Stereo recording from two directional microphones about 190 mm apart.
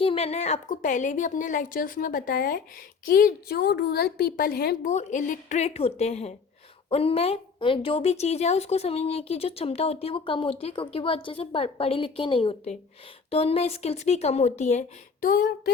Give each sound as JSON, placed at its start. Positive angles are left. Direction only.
{"t": 0.0, "sound": "a woman's voice", "side_deg": 30}
{"t": 4.9, "sound": "a woman's voice", "side_deg": 35}